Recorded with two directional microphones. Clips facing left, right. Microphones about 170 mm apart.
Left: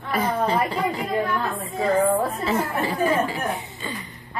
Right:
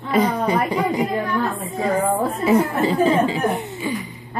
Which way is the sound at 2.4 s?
20° right (ahead or behind).